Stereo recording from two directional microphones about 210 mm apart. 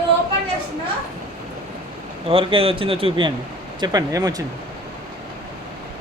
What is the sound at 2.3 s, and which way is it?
A man's voice, 25° right (ahead or behind).